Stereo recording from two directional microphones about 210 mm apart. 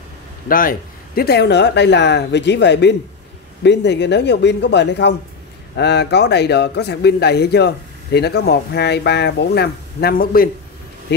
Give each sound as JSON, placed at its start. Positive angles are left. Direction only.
{"t": 0.5, "sound": "speech", "side_deg": 40}